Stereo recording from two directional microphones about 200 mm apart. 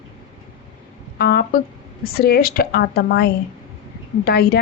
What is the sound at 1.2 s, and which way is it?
A woman's voice, 55° left (ahead or behind).